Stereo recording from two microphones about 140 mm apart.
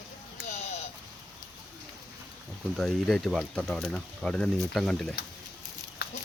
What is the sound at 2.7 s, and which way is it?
Speech, 5° left (ahead or behind).